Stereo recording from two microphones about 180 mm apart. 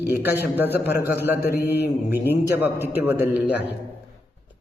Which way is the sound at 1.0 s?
10° right (ahead or behind).